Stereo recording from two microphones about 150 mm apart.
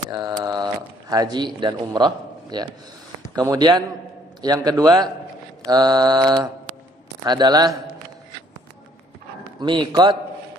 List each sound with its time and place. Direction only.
0.1 s a sound: 30° right (ahead or behind)
1.1 s mantra: 30° right (ahead or behind)
1.6 s a man's voice: 30° right (ahead or behind)
3.4 s mantra: 25° right (ahead or behind)
9.6 s a man's voice: 30° right (ahead or behind)